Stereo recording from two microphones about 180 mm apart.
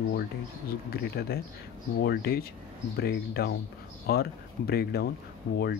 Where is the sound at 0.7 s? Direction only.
60° left (ahead or behind).